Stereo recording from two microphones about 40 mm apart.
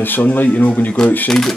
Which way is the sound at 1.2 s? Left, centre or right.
Centre.